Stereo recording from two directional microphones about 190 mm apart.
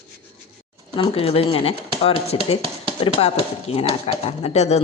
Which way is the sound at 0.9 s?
25° left (ahead or behind).